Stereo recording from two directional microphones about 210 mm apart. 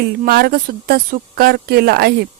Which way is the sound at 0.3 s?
45° right (ahead or behind).